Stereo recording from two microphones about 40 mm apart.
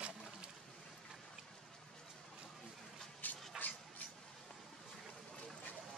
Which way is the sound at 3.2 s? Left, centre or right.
Left.